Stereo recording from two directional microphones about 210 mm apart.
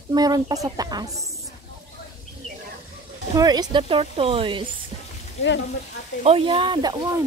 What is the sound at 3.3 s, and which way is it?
Speech, 20° right (ahead or behind).